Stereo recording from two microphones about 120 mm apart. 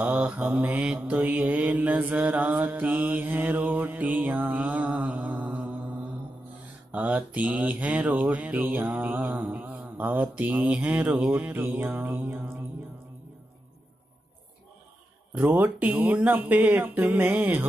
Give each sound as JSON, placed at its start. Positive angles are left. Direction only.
{"t": 0.0, "sound": "mantra", "side_deg": -10}
{"t": 15.3, "sound": "mantra", "side_deg": -15}